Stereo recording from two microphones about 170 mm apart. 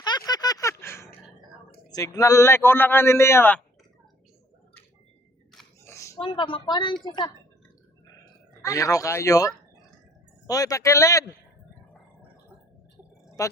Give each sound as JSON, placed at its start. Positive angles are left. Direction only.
{"t": 0.0, "sound": "a sound", "side_deg": 25}
{"t": 1.9, "sound": "a man's voice", "side_deg": 20}
{"t": 5.8, "sound": "a sound", "side_deg": 15}
{"t": 6.1, "sound": "a woman's voice", "side_deg": 30}
{"t": 8.6, "sound": "a woman's voice", "side_deg": 20}
{"t": 13.4, "sound": "a woman's voice", "side_deg": 20}